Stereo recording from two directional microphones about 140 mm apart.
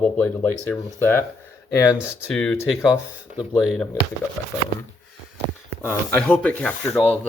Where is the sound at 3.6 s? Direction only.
Centre (ahead or behind).